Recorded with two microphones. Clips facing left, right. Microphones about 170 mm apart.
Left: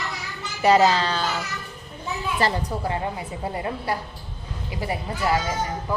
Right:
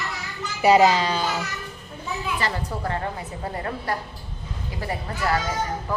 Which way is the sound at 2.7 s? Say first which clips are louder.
Left 1 dB; 15° left (ahead or behind).